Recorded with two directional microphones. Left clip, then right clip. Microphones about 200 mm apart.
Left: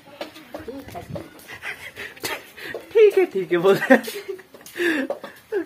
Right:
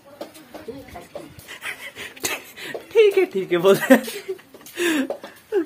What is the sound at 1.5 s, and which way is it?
Pant, 10° right (ahead or behind).